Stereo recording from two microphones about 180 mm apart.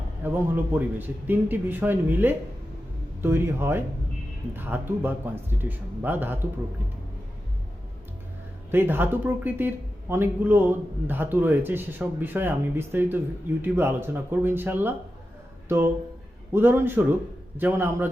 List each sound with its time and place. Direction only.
0.2 s a man's voice: 10° right (ahead or behind)
8.7 s a man's voice: 10° right (ahead or behind)
16.5 s a man's voice: 10° right (ahead or behind)